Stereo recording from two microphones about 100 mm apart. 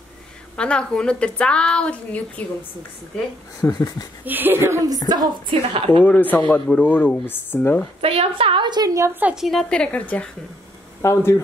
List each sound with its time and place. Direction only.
0.6 s a woman's voice: 10° left (ahead or behind)
3.6 s speech: 35° left (ahead or behind)
4.2 s a woman's voice: 20° right (ahead or behind)
4.8 s speech: 40° right (ahead or behind)
6.0 s a woman's voice: 20° left (ahead or behind)
8.0 s a woman's voice: 85° right; by 8.9 s 45° right (ahead or behind)
8.9 s a woman's voice: 30° right (ahead or behind)
9.2 s a woman's voice: 5° right (ahead or behind); by 10.3 s 15° left (ahead or behind)
11.0 s speech: 30° left (ahead or behind)